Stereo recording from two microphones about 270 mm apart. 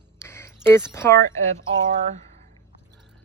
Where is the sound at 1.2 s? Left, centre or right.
Right.